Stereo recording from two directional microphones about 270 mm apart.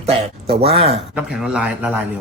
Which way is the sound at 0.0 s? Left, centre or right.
Right.